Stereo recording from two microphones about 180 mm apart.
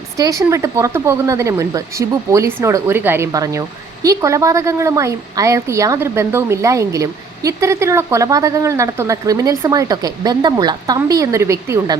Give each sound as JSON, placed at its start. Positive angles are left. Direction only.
{"t": 0.2, "sound": "a woman's voice", "side_deg": -20}